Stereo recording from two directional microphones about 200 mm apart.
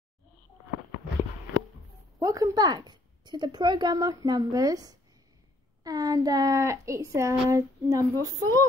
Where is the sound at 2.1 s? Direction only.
15° right (ahead or behind).